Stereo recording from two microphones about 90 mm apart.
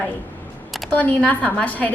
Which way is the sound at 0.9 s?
15° left (ahead or behind).